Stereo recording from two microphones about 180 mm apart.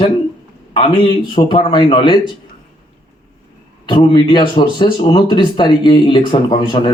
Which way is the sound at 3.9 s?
25° left (ahead or behind).